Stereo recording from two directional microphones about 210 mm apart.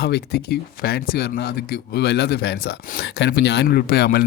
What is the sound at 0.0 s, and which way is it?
Speech, 50° left (ahead or behind).